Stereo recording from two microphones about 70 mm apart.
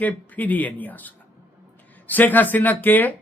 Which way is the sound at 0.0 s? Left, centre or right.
Left.